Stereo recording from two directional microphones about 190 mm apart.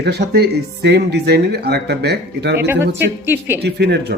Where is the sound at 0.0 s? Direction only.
60° right (ahead or behind).